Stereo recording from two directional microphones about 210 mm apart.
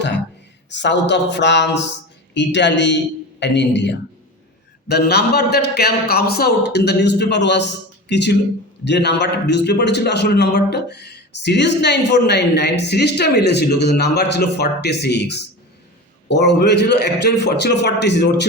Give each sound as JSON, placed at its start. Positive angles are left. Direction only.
{"t": 0.7, "sound": "a man's voice", "side_deg": 55}